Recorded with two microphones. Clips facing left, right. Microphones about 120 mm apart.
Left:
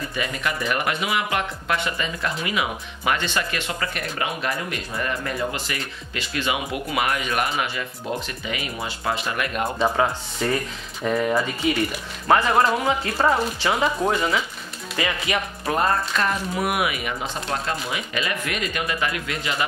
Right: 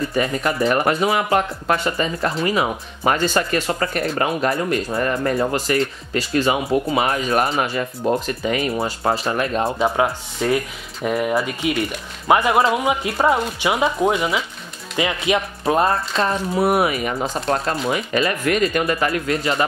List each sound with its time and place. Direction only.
0.1 s speech: 40° right (ahead or behind)
9.8 s speech: 5° right (ahead or behind); by 19.6 s 40° right (ahead or behind)